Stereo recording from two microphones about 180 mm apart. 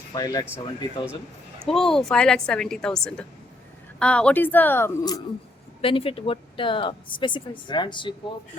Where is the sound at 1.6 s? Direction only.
Centre (ahead or behind).